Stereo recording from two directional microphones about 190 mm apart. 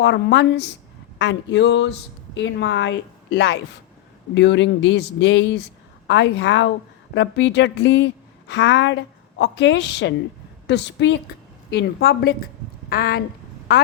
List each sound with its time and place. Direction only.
0.0 s a woman's voice: 70° left (ahead or behind); by 13.2 s 50° left (ahead or behind)